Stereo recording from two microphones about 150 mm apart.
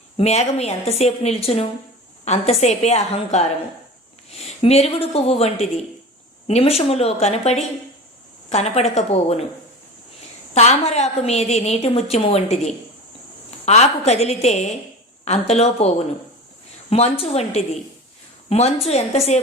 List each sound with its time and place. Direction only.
0.2 s a woman's voice: 45° left (ahead or behind)
10.5 s a woman's voice: 45° left (ahead or behind)